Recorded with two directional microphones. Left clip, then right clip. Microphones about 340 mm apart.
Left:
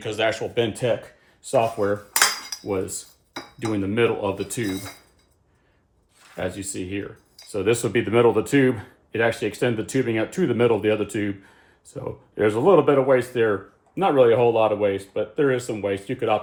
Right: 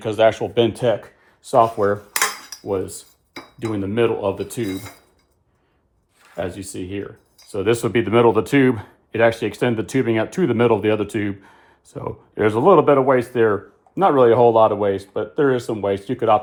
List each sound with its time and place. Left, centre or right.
0.0 s speech: centre
6.3 s speech: centre